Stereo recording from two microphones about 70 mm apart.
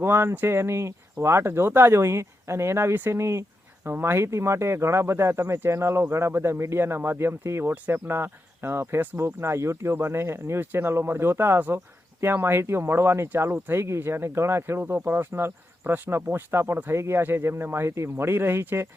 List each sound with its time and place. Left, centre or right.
0.0 s speech: right